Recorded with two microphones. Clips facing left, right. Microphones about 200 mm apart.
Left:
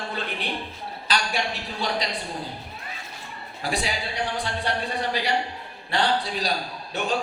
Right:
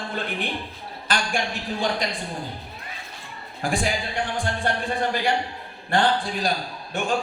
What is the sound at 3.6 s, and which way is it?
A man's voice, 50° right (ahead or behind).